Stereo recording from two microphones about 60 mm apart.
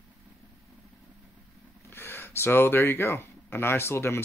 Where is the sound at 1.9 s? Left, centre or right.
Left.